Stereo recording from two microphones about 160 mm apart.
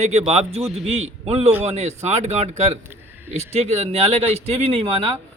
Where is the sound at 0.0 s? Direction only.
40° right (ahead or behind).